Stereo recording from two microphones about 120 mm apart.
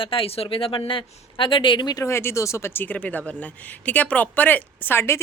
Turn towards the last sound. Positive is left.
turn(degrees=20)  # may be behind; listen again after turning